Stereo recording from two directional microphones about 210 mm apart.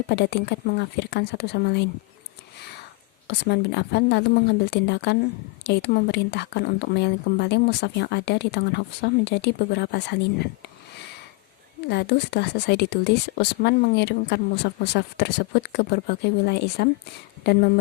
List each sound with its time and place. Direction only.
0.1 s speech: 50° left (ahead or behind)
3.2 s speech: 50° left (ahead or behind)
11.9 s speech: 50° left (ahead or behind)